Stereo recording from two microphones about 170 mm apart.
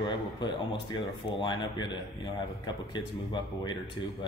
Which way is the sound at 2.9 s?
25° left (ahead or behind).